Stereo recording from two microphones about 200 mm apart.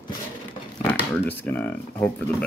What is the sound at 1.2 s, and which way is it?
Speech, 10° left (ahead or behind).